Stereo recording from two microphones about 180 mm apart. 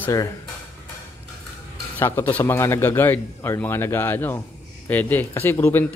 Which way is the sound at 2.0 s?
10° left (ahead or behind).